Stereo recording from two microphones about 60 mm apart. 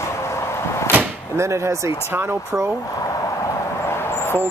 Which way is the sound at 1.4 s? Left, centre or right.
Right.